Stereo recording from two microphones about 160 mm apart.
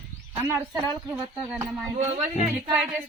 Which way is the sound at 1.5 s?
5° right (ahead or behind).